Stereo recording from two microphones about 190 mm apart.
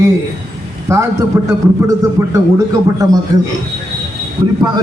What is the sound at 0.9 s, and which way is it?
A man's voice, 15° right (ahead or behind).